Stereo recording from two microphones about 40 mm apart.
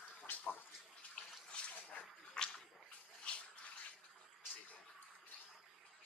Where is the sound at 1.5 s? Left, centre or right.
Left.